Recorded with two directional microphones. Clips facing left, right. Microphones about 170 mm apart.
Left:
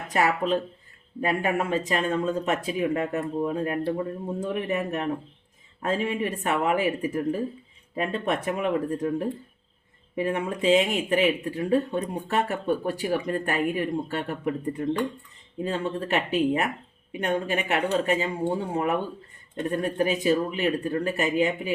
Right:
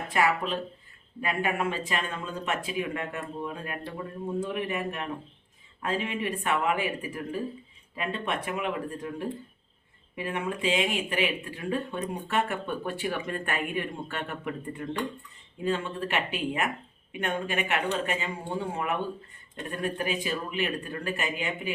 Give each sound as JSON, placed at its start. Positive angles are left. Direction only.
{"t": 0.1, "sound": "speech", "side_deg": 40}